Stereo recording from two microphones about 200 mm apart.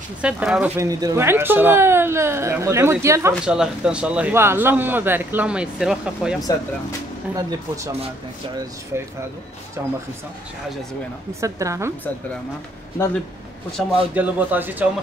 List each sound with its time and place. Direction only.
0.2 s speech: 5° right (ahead or behind)
3.4 s speech: 5° right (ahead or behind)
9.8 s speech: 15° right (ahead or behind)
11.4 s speech: 15° right (ahead or behind)
13.7 s speech: 5° left (ahead or behind)
14.1 s speech: 10° right (ahead or behind)